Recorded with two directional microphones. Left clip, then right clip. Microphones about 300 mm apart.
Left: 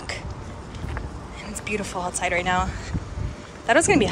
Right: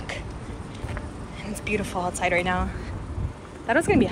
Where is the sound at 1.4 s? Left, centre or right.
Centre.